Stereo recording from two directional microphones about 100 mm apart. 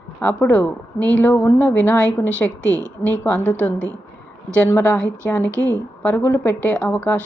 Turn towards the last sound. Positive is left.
turn(degrees=15)  # may be behind; listen again after turning